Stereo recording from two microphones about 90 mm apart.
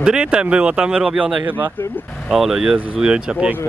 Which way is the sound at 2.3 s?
5° right (ahead or behind).